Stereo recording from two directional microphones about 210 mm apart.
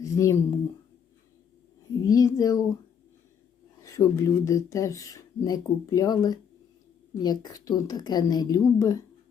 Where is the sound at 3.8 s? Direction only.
15° left (ahead or behind).